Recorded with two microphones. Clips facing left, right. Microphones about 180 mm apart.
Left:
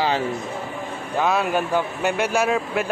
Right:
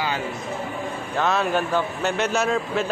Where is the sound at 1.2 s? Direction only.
10° left (ahead or behind).